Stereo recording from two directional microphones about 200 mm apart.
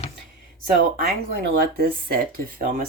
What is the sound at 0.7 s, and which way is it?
Speech, 50° right (ahead or behind).